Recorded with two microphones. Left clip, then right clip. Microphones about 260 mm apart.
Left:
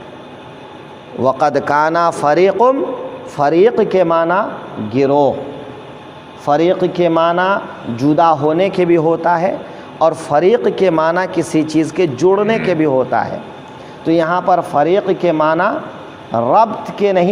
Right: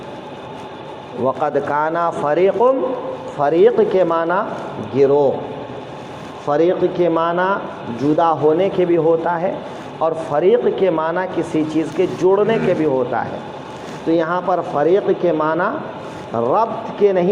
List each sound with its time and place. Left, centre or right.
1.2 s speech: left
6.4 s speech: left